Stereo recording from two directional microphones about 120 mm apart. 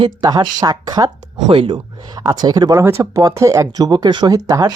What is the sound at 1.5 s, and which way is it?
Speech, 45° right (ahead or behind).